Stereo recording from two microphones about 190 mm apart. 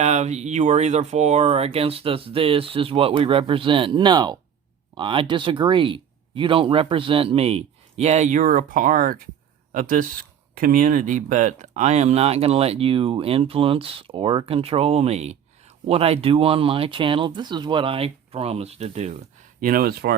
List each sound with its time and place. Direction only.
0.0 s speech: 35° right (ahead or behind)
19.6 s speech: 50° right (ahead or behind)